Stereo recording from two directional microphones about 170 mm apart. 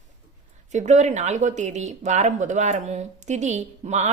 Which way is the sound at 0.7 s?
45° right (ahead or behind).